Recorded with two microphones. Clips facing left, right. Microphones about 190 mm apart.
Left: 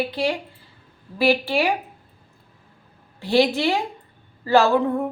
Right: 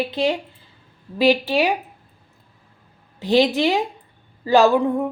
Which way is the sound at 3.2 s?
20° right (ahead or behind).